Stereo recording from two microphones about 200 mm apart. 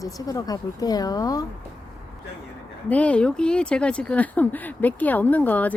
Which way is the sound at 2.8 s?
5° left (ahead or behind).